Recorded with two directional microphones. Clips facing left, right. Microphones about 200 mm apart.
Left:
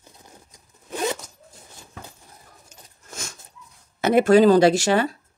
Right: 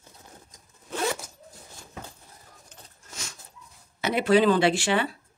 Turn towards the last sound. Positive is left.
turn(degrees=40)  # may be behind; listen again after turning